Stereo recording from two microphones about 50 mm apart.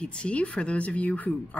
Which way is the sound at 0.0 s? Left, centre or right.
Left.